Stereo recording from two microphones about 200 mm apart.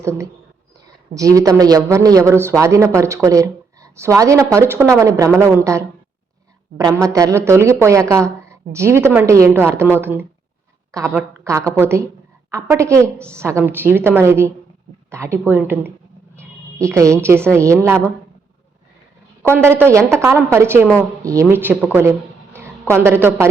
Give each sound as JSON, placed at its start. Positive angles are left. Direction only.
{"t": 0.0, "sound": "a woman's voice", "side_deg": -15}
{"t": 7.0, "sound": "a woman's voice", "side_deg": -15}
{"t": 19.4, "sound": "a woman's voice", "side_deg": -10}